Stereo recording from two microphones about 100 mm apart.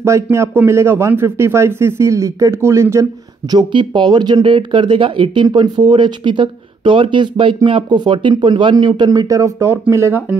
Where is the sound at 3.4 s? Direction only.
50° right (ahead or behind).